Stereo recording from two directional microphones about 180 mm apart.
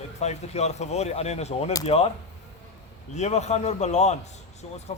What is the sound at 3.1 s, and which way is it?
Speech, 40° left (ahead or behind).